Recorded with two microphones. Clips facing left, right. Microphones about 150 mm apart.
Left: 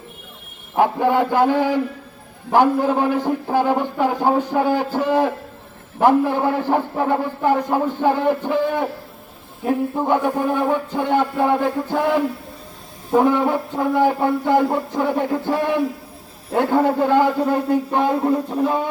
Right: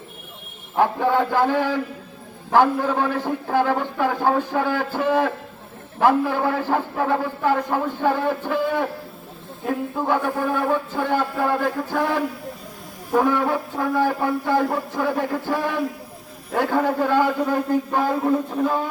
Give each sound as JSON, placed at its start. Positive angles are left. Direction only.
{"t": 0.8, "sound": "a man's voice", "side_deg": 15}
{"t": 13.1, "sound": "a man's voice", "side_deg": 20}